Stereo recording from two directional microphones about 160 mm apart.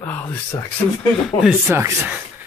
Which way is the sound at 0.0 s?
15° left (ahead or behind).